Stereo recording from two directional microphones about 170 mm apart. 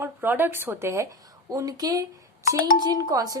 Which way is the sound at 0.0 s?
10° right (ahead or behind).